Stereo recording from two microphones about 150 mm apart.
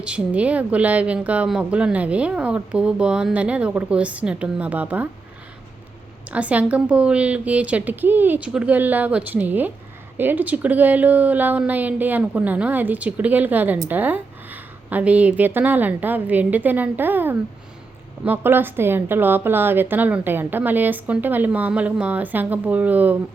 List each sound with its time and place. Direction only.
0.0 s speech: 10° right (ahead or behind)
6.3 s speech: 10° right (ahead or behind)